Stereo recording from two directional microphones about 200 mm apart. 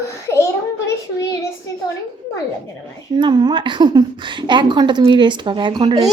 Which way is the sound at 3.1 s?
20° right (ahead or behind).